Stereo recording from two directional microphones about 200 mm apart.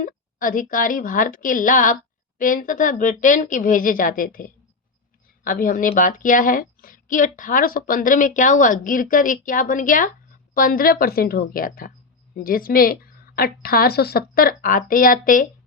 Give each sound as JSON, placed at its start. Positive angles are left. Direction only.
{"t": 0.0, "sound": "a woman's voice", "side_deg": 45}